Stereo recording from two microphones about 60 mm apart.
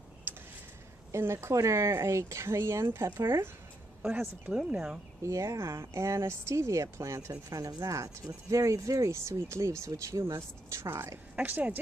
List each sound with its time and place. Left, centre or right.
0.3 s a sound: right
1.1 s speech: right
4.5 s speech: centre
5.2 s speech: right
9.1 s speech: right
10.7 s speech: right
11.3 s a woman's voice: right